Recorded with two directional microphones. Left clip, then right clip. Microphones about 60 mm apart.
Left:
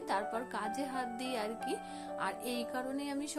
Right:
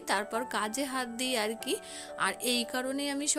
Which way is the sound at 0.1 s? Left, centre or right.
Right.